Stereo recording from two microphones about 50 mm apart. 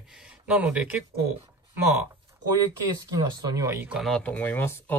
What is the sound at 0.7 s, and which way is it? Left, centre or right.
Speech, right.